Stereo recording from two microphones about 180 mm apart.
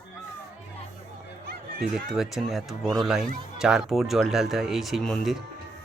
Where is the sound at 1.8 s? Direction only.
Centre (ahead or behind).